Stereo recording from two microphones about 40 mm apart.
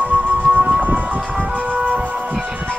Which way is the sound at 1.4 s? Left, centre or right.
Right.